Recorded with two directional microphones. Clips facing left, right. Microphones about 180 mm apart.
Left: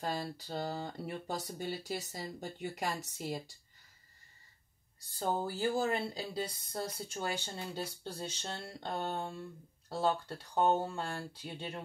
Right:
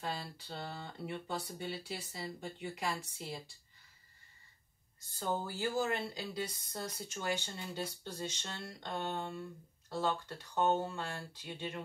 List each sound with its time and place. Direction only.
0.0 s speech: 40° left (ahead or behind)
5.2 s speech: 30° left (ahead or behind)